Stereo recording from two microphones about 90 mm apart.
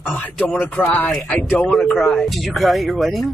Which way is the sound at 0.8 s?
15° left (ahead or behind).